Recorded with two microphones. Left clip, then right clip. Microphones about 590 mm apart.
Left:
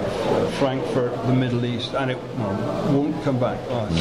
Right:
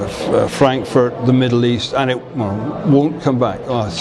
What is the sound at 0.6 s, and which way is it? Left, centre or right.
Speech, right.